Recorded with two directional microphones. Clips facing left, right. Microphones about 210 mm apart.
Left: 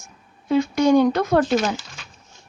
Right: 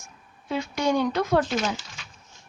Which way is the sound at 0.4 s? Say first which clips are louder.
Left 8 dB; 45° left (ahead or behind).